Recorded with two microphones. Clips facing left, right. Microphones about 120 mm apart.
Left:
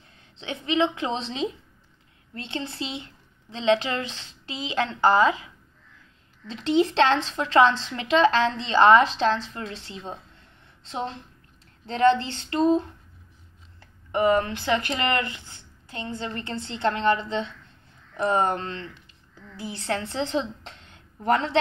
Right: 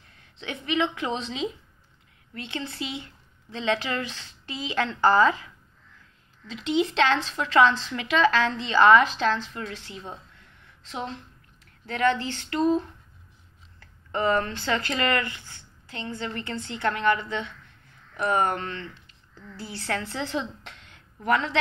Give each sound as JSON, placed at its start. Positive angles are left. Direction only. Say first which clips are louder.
{"t": 0.1, "sound": "a woman's voice", "louder": "left 1 dB", "side_deg": 25}
{"t": 6.5, "sound": "speech", "louder": "left 3 dB", "side_deg": 35}
{"t": 13.7, "sound": "a woman's voice", "louder": "left 4 dB", "side_deg": 15}